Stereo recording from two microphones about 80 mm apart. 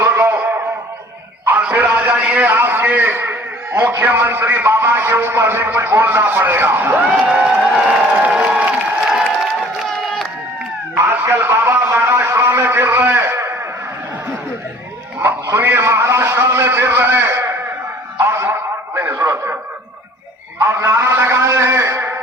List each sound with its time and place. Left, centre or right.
0.0 s music: right
1.5 s a sound: right
3.7 s a man's voice: right
7.0 s speech: centre
10.0 s crowd: centre
10.9 s a man's voice: right
15.5 s a man's voice: right
18.2 s a sound: right
18.9 s radio: right
20.6 s a man's voice: right